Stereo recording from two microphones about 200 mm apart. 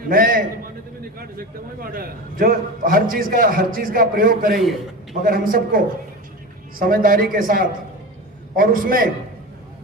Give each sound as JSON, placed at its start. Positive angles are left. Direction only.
{"t": 0.1, "sound": "a man's voice", "side_deg": -45}